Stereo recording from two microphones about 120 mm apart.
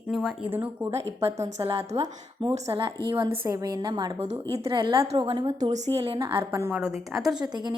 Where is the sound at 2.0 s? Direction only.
45° right (ahead or behind).